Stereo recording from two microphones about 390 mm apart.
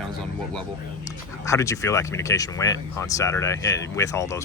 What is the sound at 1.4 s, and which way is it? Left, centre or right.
Speech, centre.